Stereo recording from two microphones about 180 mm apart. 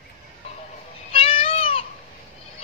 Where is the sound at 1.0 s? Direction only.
30° left (ahead or behind).